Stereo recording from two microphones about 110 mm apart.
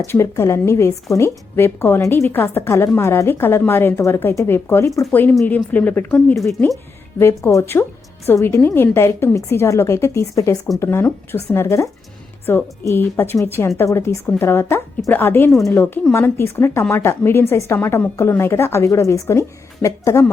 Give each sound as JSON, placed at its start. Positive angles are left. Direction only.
{"t": 0.0, "sound": "a woman's voice", "side_deg": 25}
{"t": 6.3, "sound": "a woman's voice", "side_deg": 0}
{"t": 7.2, "sound": "a woman's voice", "side_deg": 25}